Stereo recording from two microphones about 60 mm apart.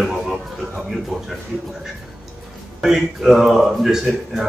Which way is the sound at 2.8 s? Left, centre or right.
Centre.